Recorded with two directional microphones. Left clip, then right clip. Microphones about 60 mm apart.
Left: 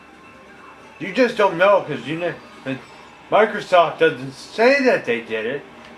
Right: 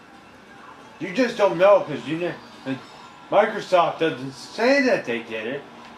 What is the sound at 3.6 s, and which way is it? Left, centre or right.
Speech, left.